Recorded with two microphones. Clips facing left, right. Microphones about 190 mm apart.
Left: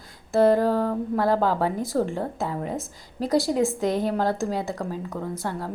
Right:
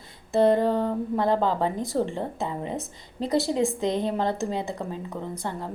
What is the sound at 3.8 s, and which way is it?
Speech, 20° right (ahead or behind).